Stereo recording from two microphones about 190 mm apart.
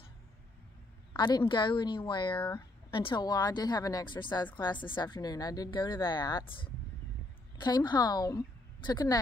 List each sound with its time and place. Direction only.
1.1 s a woman's voice: 25° left (ahead or behind)